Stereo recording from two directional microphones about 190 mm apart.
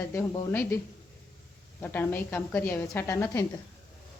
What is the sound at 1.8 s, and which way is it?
Speech, 10° left (ahead or behind).